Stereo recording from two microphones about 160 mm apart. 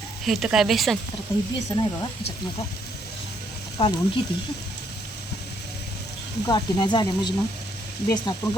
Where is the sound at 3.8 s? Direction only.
35° left (ahead or behind).